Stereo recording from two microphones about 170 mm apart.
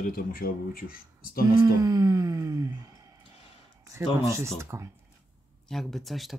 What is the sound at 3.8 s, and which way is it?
Speech, 15° right (ahead or behind).